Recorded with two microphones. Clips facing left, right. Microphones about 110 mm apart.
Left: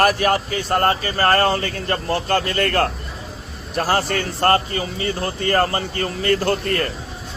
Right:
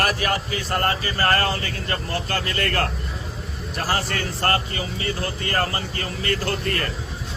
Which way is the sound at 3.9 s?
35° left (ahead or behind).